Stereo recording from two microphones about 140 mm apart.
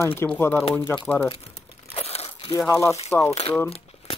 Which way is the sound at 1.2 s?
45° left (ahead or behind).